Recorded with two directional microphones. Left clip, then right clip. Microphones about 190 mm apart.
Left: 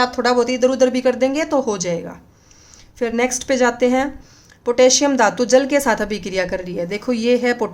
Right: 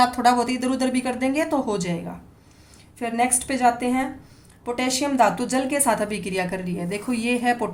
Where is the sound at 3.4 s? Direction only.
40° left (ahead or behind).